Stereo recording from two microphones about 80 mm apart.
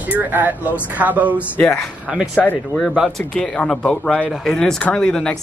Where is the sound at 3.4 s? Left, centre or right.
Centre.